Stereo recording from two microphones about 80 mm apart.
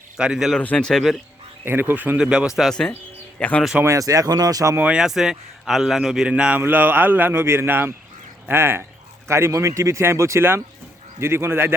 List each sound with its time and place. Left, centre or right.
0.2 s a man's voice: centre
0.6 s speech: centre
1.6 s a man's voice: right
2.1 s a man's voice: centre
2.6 s speech: centre
3.3 s speech: centre
3.8 s speech: right
4.8 s a man's voice: centre
6.6 s a man's voice: right